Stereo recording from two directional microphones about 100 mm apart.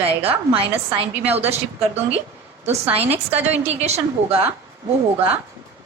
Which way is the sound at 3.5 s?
90° right.